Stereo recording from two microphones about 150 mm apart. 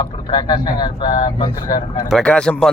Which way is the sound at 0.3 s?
30° left (ahead or behind).